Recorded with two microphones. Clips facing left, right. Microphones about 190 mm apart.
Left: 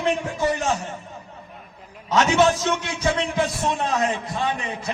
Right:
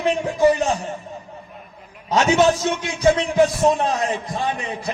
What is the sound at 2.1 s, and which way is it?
A man's voice, 40° right (ahead or behind).